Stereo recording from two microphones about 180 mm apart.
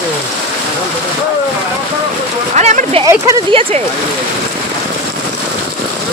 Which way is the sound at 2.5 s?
40° right (ahead or behind).